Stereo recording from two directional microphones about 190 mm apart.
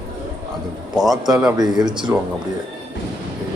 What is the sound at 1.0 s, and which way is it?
Speech, centre (ahead or behind).